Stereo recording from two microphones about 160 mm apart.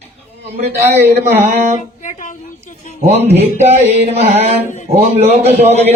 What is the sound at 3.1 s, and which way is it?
Speech, 40° right (ahead or behind).